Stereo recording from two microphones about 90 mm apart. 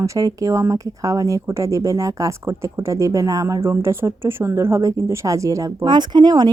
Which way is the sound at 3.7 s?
30° right (ahead or behind).